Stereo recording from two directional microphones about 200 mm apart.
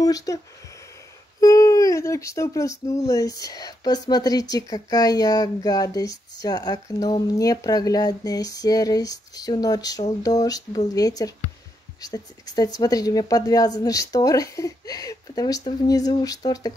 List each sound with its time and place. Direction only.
0.0 s speech: 20° left (ahead or behind)
1.4 s speech: 15° left (ahead or behind)